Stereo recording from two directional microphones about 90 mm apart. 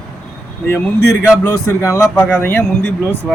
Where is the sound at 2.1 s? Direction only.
20° left (ahead or behind).